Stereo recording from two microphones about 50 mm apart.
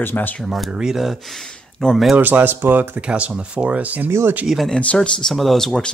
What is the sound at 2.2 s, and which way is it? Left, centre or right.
Speech, right.